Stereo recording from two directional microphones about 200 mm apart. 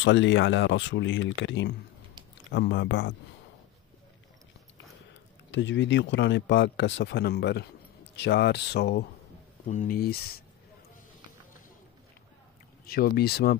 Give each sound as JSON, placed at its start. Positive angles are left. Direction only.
{"t": 0.0, "sound": "speech", "side_deg": 65}
{"t": 5.5, "sound": "speech", "side_deg": 65}
{"t": 9.7, "sound": "speech", "side_deg": 40}
{"t": 12.8, "sound": "speech", "side_deg": 50}